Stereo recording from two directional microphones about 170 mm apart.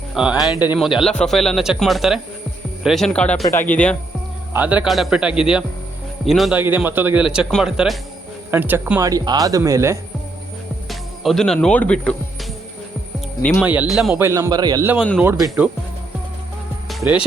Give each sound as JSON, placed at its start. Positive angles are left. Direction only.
{"t": 0.1, "sound": "speech", "side_deg": -5}
{"t": 4.5, "sound": "speech", "side_deg": -10}
{"t": 6.6, "sound": "speech", "side_deg": -10}
{"t": 8.4, "sound": "speech", "side_deg": -10}
{"t": 10.8, "sound": "speech", "side_deg": 0}
{"t": 13.4, "sound": "speech", "side_deg": 10}
{"t": 13.7, "sound": "speech", "side_deg": -5}
{"t": 14.1, "sound": "speech", "side_deg": -15}